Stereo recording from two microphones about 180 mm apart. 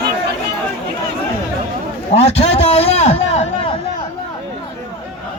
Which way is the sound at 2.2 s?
35° left (ahead or behind).